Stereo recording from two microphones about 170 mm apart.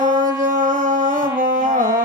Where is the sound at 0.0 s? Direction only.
50° right (ahead or behind).